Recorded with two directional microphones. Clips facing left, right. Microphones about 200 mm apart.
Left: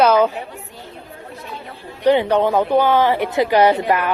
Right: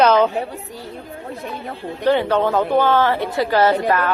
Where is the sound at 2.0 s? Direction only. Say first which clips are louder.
Left 2 dB; 15° left (ahead or behind).